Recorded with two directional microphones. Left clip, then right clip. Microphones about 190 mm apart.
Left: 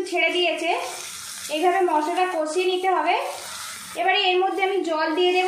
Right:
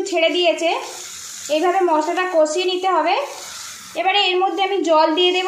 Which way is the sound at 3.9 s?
40° right (ahead or behind).